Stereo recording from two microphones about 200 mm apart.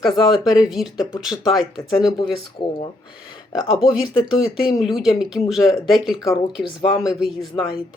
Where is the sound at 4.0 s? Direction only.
25° left (ahead or behind).